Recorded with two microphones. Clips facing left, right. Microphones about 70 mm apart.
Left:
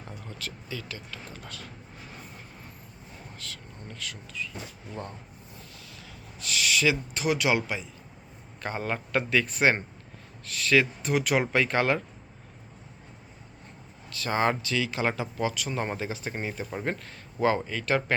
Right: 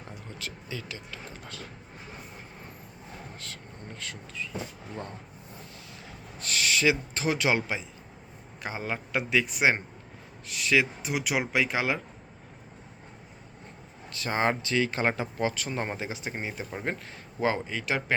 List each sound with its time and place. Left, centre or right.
0.0 s speech: right
3.3 s speech: right
6.1 s speech: right
8.6 s speech: centre
14.1 s speech: right